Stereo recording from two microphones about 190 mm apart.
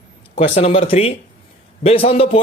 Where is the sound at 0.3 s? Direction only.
35° left (ahead or behind).